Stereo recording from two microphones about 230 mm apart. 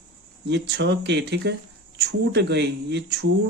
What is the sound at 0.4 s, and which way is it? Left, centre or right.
Speech, right.